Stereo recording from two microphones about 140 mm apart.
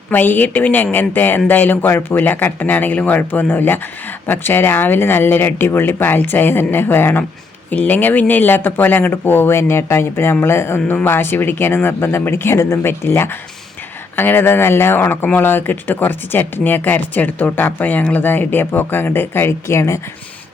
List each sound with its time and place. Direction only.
0.1 s speech: 15° left (ahead or behind)